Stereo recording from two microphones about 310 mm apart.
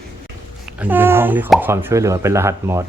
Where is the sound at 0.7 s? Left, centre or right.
Centre.